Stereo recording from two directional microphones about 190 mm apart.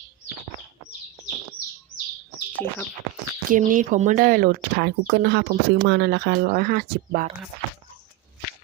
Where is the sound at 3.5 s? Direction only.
45° right (ahead or behind).